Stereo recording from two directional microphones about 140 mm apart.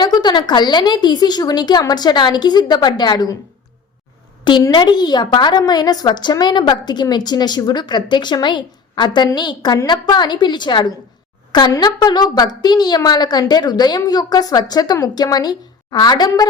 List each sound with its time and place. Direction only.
0.0 s a woman's voice: 30° left (ahead or behind)
4.4 s a woman's voice: 35° left (ahead or behind)